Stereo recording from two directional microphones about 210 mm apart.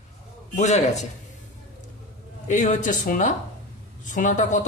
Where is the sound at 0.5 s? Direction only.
35° left (ahead or behind).